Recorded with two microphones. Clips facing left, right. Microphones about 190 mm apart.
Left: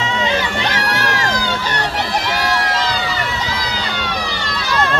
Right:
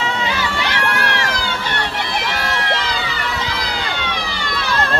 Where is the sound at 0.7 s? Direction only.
40° left (ahead or behind).